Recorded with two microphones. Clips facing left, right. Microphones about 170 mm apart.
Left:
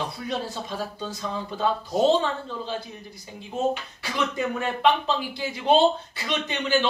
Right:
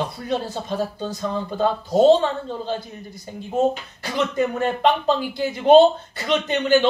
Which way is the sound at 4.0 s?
45° right (ahead or behind).